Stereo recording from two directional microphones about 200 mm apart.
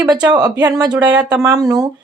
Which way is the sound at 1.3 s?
15° right (ahead or behind).